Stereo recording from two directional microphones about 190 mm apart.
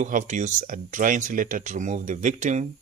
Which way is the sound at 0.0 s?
40° right (ahead or behind).